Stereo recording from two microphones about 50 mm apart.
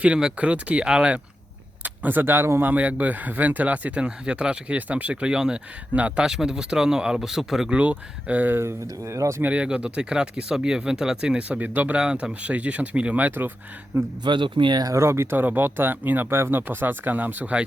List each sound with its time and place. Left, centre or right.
0.0 s speech: centre
1.8 s speech: right
2.6 s speech: right
5.3 s speech: centre
5.9 s speech: right
6.2 s speech: centre
7.7 s speech: right
8.4 s speech: right
9.0 s speech: right
9.5 s speech: right
11.4 s speech: right
11.9 s speech: right
13.9 s speech: right
15.3 s speech: right